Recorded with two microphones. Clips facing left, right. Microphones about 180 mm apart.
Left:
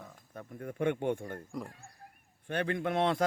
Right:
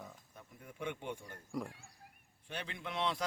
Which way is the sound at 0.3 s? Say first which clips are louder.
Left 12 dB; 55° left (ahead or behind).